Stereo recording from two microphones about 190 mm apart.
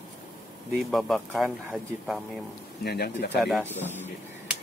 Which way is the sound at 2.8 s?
55° left (ahead or behind).